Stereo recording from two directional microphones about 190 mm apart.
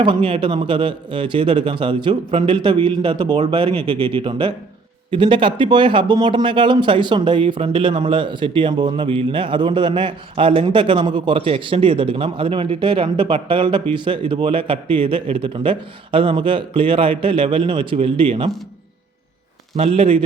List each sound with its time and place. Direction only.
0.0 s speech: 25° right (ahead or behind)
19.7 s a man's voice: 30° right (ahead or behind)